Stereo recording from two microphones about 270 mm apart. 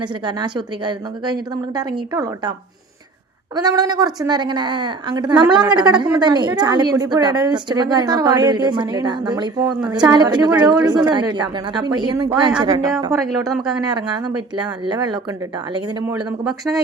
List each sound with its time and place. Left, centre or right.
0.0 s a woman's voice: centre
13.5 s speech: centre
13.9 s a woman's voice: centre
16.4 s speech: centre